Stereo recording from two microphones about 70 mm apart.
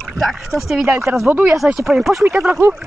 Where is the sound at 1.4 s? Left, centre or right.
Centre.